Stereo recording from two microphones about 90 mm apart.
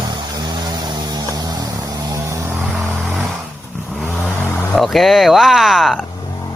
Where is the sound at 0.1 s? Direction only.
50° right (ahead or behind).